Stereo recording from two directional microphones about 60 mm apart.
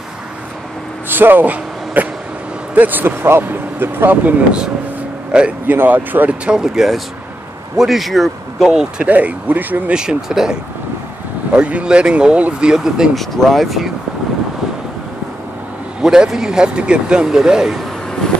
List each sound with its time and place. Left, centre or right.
1.0 s speech: right
5.3 s speech: centre
5.7 s speech: right
6.4 s a man's voice: centre
9.0 s speech: right
9.9 s speech: centre
13.1 s a man's voice: centre
16.0 s speech: centre